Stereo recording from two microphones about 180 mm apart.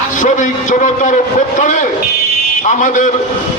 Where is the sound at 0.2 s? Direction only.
45° left (ahead or behind).